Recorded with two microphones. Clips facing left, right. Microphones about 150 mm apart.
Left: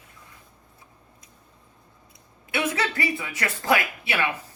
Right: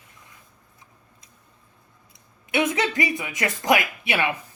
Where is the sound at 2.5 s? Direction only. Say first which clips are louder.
Right 3 dB; 20° right (ahead or behind).